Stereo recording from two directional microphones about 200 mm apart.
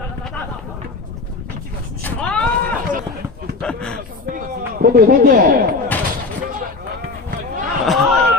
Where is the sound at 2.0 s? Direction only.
5° left (ahead or behind).